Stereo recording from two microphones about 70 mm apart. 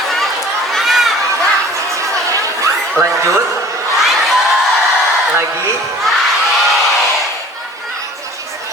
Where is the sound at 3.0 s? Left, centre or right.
Right.